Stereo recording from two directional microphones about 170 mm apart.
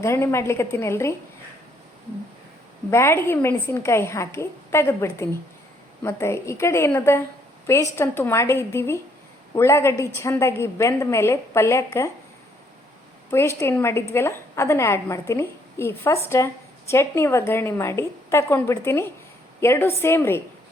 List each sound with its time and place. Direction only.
0.0 s a woman's voice: 15° left (ahead or behind)
2.9 s a woman's voice: 15° left (ahead or behind)
13.3 s a woman's voice: 15° left (ahead or behind)